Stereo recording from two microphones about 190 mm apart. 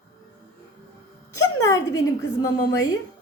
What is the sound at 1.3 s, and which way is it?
Speech, 15° left (ahead or behind).